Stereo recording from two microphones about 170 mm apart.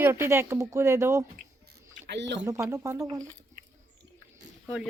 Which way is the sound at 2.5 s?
20° right (ahead or behind).